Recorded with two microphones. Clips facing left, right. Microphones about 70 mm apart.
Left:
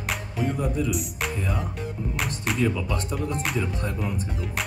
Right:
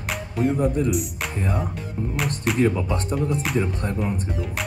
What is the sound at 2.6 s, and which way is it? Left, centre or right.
Speech, right.